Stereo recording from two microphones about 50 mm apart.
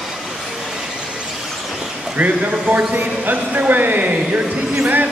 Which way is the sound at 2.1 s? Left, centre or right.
Right.